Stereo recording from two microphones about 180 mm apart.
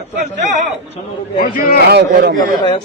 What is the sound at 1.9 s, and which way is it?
Speech, 65° right (ahead or behind).